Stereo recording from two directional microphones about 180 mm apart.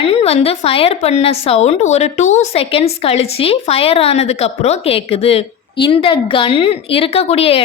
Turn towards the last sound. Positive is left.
turn(degrees=30)  # may be behind; listen again after turning